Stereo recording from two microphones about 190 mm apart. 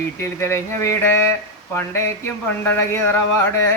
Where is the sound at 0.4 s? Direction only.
15° left (ahead or behind).